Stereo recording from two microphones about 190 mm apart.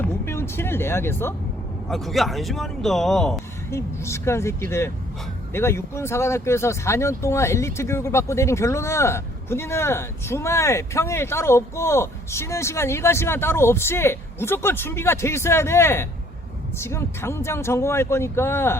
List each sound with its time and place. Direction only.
0.0 s music: 15° left (ahead or behind)
1.9 s speech: centre (ahead or behind)
3.7 s speech: 15° left (ahead or behind)